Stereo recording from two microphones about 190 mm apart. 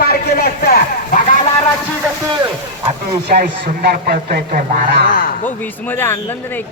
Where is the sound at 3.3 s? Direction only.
50° right (ahead or behind).